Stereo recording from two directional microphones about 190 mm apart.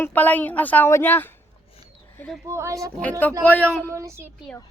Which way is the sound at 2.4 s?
15° right (ahead or behind).